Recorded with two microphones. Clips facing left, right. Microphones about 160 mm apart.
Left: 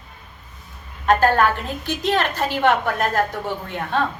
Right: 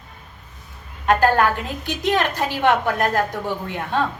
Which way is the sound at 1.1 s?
15° right (ahead or behind).